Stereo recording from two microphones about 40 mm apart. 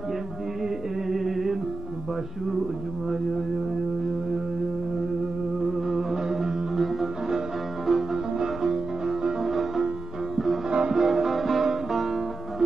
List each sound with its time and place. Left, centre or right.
1.1 s music: centre
5.7 s music: centre
10.7 s music: right
11.0 s music: centre